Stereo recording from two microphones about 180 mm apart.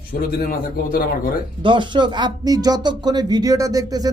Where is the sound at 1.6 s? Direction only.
25° right (ahead or behind).